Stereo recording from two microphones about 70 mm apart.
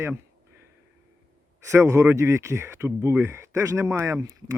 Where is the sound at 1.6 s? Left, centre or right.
Right.